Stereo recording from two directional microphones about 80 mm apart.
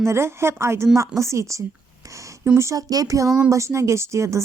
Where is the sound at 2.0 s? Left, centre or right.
Right.